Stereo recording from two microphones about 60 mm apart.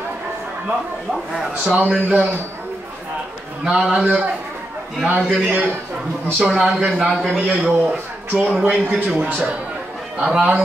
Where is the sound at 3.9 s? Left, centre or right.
Right.